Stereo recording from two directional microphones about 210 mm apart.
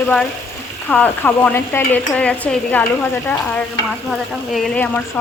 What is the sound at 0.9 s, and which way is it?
Speech, 5° left (ahead or behind).